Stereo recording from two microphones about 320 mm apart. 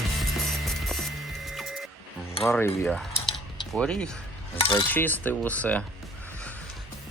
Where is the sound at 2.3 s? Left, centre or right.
Centre.